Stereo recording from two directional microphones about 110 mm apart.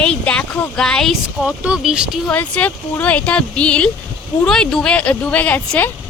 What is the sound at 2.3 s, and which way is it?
Speech, 15° left (ahead or behind).